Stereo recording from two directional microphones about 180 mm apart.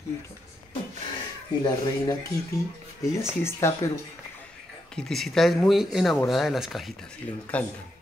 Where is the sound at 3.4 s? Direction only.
15° left (ahead or behind).